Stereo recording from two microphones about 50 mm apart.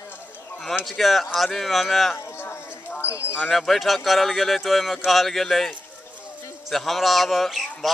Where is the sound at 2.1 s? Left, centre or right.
Left.